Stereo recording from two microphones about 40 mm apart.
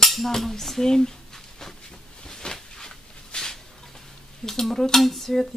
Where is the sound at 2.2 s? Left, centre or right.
Centre.